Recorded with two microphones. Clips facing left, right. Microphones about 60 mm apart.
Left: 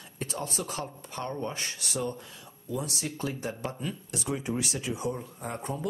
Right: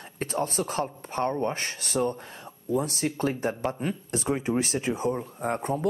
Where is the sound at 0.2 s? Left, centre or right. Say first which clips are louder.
Right 6 dB; right.